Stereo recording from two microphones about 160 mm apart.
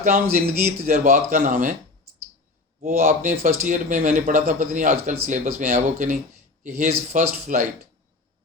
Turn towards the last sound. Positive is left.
turn(degrees=-50)  # may be behind; listen again after turning